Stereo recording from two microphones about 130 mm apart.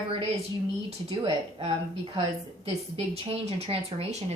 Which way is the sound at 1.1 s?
45° right (ahead or behind).